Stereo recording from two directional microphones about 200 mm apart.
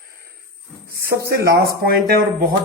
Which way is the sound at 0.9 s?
50° right (ahead or behind).